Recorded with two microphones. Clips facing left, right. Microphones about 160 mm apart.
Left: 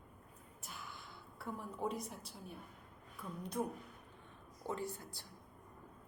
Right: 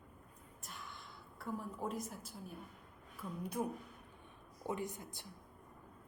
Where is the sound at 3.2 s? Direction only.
10° right (ahead or behind).